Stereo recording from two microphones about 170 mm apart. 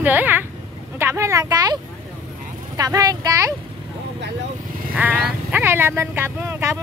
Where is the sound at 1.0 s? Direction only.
15° right (ahead or behind).